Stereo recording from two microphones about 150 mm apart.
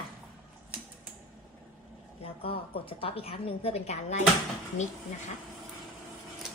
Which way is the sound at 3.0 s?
40° left (ahead or behind).